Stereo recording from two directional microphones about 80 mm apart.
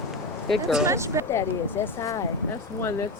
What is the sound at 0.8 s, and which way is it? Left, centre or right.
Speech, right.